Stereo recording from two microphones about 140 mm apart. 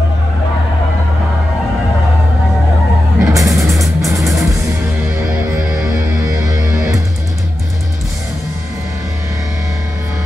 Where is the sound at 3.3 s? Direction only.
25° right (ahead or behind).